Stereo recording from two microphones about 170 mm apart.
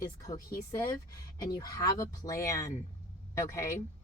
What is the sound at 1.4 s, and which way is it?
Speech, 25° left (ahead or behind).